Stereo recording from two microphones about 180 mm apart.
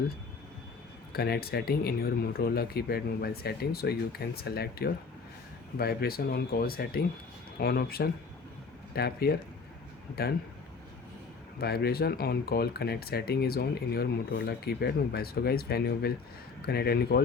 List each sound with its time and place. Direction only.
1.1 s speech: 60° left (ahead or behind)
11.6 s speech: 60° left (ahead or behind)